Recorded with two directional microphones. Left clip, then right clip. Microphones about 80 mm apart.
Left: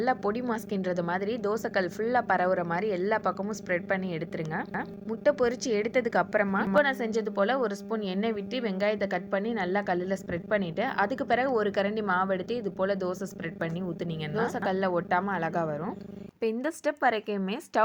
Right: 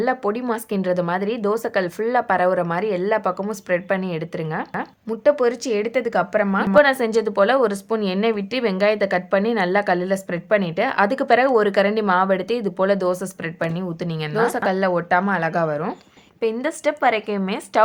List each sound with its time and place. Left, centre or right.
0.0 s a woman's voice: left
6.8 s speech: left
13.7 s a woman's voice: left
14.3 s a woman's voice: left
15.3 s a woman's voice: left
16.4 s a woman's voice: left